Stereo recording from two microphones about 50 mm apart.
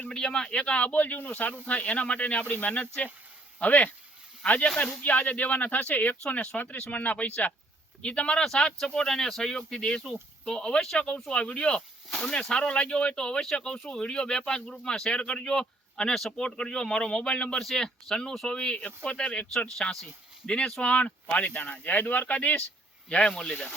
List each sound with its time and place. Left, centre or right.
0.1 s speech: centre; by 6.1 s left
6.5 s speech: left
6.9 s speech: left
8.8 s speech: centre
19.5 s speech: centre
20.8 s speech: left
23.0 s speech: left